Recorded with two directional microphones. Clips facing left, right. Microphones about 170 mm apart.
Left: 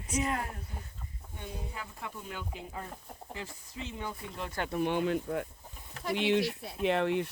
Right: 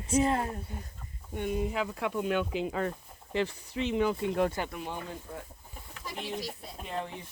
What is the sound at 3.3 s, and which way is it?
Speech, 75° right (ahead or behind).